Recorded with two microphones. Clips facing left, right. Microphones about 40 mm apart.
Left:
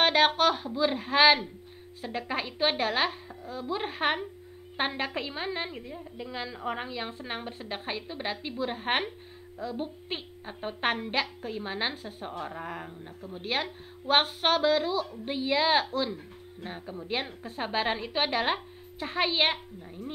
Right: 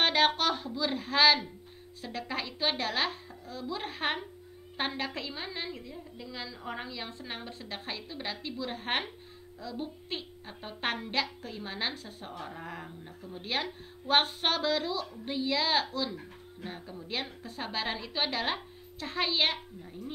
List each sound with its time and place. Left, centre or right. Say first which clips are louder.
0.0 s a woman's voice: left 3 dB; centre
15.2 s a woman's voice: left 3 dB; left
16.6 s a woman's voice: left 4 dB; centre